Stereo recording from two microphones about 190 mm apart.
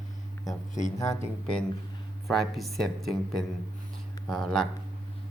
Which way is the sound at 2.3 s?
Centre (ahead or behind).